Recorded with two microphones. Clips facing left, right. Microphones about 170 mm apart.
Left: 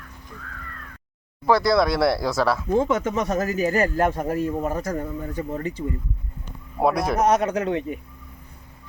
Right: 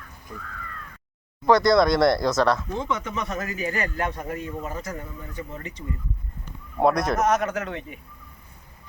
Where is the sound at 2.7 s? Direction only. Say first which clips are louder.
Left 7 dB; 50° left (ahead or behind).